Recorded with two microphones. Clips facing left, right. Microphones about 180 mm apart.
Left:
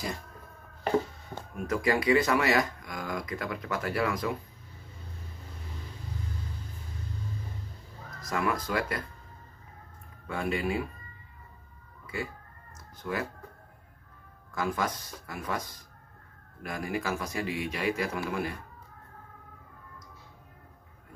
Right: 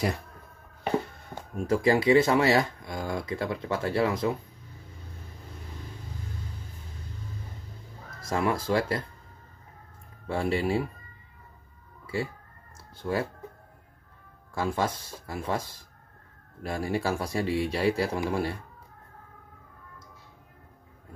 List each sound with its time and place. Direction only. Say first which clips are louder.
1.7 s speech: right 4 dB; 30° right (ahead or behind)
8.2 s speech: right 3 dB; 30° right (ahead or behind)
10.2 s a man's voice: right 3 dB; 30° right (ahead or behind)
12.1 s speech: right 5 dB; 30° right (ahead or behind)
14.5 s a man's voice: right 3 dB; 30° right (ahead or behind)